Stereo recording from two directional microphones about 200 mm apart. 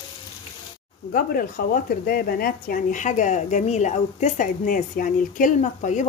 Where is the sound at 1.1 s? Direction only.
45° left (ahead or behind).